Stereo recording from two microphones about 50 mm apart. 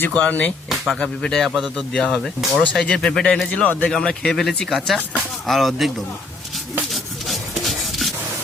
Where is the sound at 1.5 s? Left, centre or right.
Centre.